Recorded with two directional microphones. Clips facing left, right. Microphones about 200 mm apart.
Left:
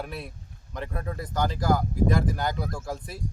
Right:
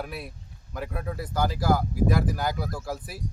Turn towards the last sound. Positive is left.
turn(degrees=-5)  # may be behind; listen again after turning